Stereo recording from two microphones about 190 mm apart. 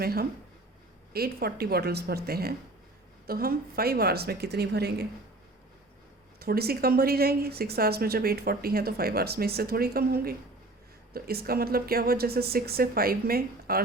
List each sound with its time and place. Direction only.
0.0 s a woman's voice: 55° right (ahead or behind)
6.4 s speech: 55° right (ahead or behind)